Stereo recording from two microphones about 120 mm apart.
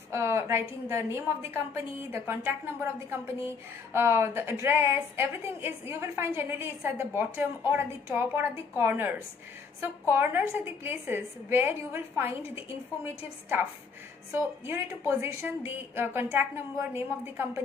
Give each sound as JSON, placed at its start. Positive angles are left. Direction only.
{"t": 0.1, "sound": "a woman's voice", "side_deg": -20}